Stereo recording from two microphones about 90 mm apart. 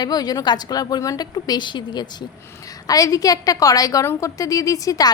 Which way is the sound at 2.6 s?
40° left (ahead or behind).